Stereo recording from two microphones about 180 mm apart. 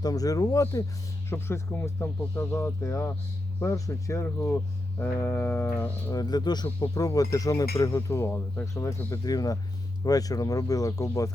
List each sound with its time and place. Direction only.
0.0 s speech: 20° left (ahead or behind)